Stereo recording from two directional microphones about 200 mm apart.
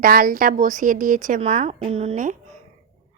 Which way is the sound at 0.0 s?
45° right (ahead or behind).